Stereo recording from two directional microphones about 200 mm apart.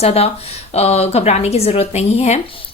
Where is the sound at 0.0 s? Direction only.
30° left (ahead or behind).